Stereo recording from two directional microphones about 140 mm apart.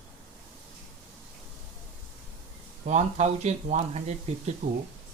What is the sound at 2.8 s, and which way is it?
Speech, 55° right (ahead or behind).